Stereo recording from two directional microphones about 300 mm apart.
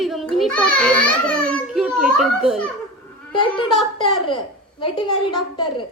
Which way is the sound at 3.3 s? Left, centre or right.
Centre.